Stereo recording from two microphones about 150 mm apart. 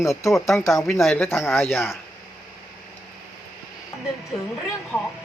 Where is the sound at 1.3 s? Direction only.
15° left (ahead or behind).